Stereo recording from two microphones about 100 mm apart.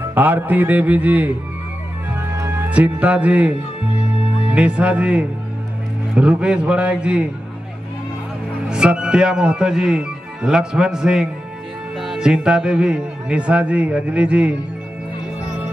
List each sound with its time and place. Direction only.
0.0 s speech: 20° right (ahead or behind)
2.3 s speech: 25° right (ahead or behind)
8.6 s speech: 10° right (ahead or behind)